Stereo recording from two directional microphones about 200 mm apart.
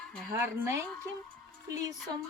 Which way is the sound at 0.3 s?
15° right (ahead or behind).